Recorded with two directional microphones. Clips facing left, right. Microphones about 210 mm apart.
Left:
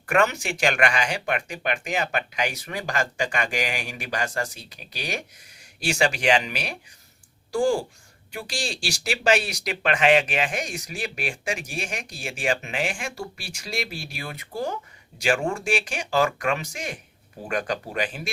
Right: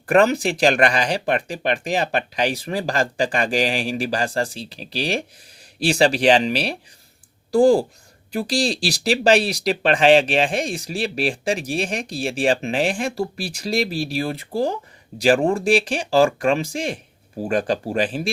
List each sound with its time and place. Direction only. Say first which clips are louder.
0.0 s speech: right 6 dB; 35° right (ahead or behind)